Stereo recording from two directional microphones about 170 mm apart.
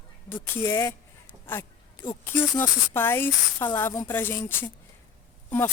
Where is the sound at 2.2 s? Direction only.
10° left (ahead or behind).